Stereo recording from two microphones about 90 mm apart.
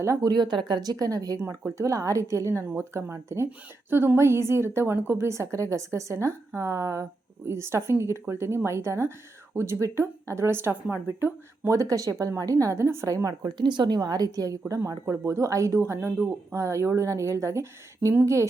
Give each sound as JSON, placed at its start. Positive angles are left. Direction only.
{"t": 0.0, "sound": "speech", "side_deg": -35}
{"t": 0.3, "sound": "speech", "side_deg": -55}
{"t": 13.6, "sound": "speech", "side_deg": -55}